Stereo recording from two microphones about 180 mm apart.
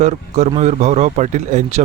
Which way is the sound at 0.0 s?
40° right (ahead or behind).